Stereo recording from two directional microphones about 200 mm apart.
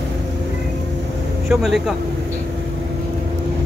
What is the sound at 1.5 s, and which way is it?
Speech, centre (ahead or behind).